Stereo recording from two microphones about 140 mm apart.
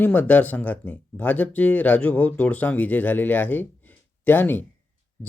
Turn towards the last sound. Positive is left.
turn(degrees=15)  # may be behind; listen again after turning